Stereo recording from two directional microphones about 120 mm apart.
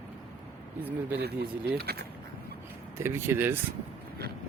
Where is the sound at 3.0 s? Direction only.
20° right (ahead or behind).